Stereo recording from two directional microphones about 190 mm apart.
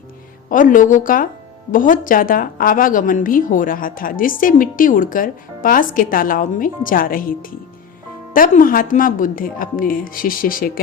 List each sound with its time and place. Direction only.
0.5 s a woman's voice: 45° left (ahead or behind)